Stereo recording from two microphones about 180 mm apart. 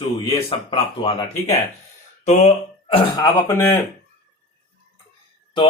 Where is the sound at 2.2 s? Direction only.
40° left (ahead or behind).